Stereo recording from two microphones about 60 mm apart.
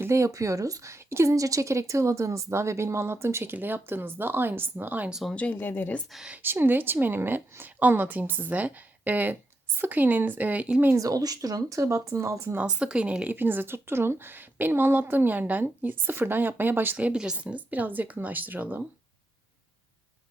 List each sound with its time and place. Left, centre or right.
0.1 s speech: right
5.3 s speech: left
5.5 s speech: left
6.4 s a woman's voice: right
10.9 s speech: right
12.6 s speech: centre
13.3 s a woman's voice: right
17.1 s speech: centre
17.3 s a woman's voice: right